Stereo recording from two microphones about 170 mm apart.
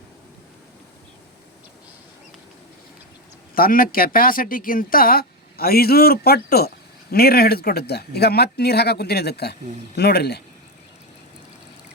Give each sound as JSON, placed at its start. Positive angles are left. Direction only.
{"t": 3.5, "sound": "speech", "side_deg": 55}